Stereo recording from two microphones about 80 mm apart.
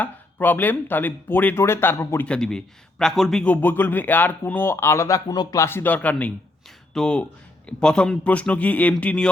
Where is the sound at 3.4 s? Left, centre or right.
Left.